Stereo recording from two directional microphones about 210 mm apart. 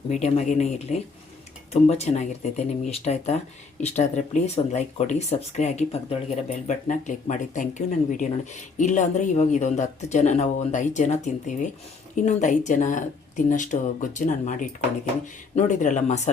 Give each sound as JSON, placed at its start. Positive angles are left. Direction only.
{"t": 0.1, "sound": "speech", "side_deg": 35}